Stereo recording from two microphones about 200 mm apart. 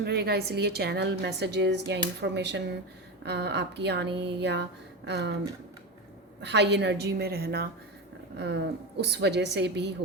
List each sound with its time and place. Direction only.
0.0 s a woman's voice: 55° right (ahead or behind)
6.4 s a woman's voice: 60° right (ahead or behind)